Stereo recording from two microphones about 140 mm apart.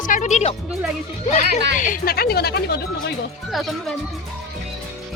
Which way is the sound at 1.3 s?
55° left (ahead or behind).